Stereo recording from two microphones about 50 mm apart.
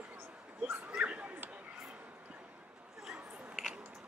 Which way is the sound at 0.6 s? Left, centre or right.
Centre.